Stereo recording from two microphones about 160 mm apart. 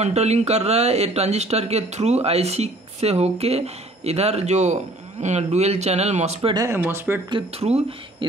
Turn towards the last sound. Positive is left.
turn(degrees=-40)  # may be behind; listen again after turning